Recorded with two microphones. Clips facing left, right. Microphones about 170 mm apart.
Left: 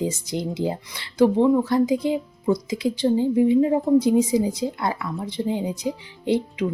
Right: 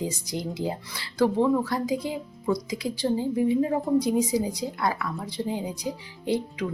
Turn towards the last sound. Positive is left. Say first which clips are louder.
# left 5 dB
turn(degrees=25)  # may be behind; listen again after turning